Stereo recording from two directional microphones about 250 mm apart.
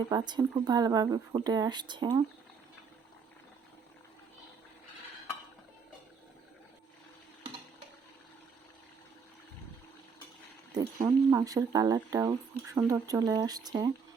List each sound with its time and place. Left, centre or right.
0.1 s speech: centre
11.0 s speech: centre